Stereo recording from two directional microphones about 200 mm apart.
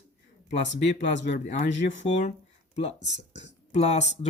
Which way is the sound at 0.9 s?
60° left (ahead or behind).